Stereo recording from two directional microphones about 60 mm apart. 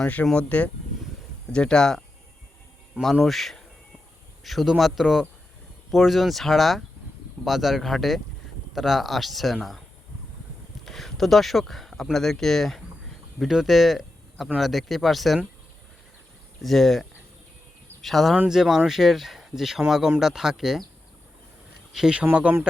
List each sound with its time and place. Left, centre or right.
0.0 s speech: left; by 2.0 s centre
3.2 s speech: centre
10.8 s speech: centre
13.5 s speech: centre
16.6 s speech: centre
21.9 s speech: centre